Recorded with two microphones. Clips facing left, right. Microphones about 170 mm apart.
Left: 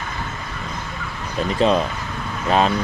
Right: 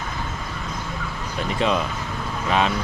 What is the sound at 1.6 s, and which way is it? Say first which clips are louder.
Speech: left 5 dB; 35° left (ahead or behind).